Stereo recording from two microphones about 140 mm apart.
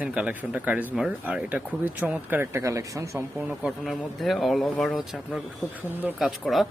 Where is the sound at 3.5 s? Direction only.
5° right (ahead or behind).